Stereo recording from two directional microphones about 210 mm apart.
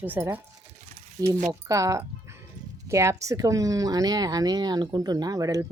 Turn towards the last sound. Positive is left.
turn(degrees=-15)  # may be behind; listen again after turning